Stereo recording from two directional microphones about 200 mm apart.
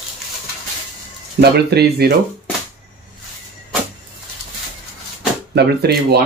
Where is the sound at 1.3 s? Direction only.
55° right (ahead or behind).